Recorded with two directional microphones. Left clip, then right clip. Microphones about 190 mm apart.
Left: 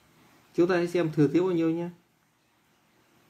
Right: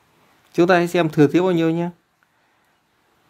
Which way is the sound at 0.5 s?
55° right (ahead or behind).